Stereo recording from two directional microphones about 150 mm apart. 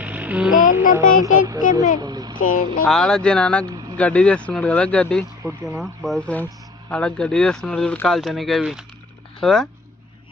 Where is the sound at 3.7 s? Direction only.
25° right (ahead or behind).